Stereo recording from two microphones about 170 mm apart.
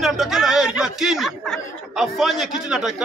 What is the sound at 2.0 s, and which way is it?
Speech, centre (ahead or behind).